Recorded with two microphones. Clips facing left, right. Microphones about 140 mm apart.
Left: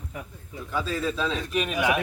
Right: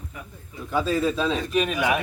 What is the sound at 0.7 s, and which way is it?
Speech, 10° right (ahead or behind).